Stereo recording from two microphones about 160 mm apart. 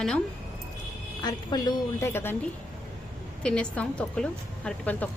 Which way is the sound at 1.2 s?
25° left (ahead or behind).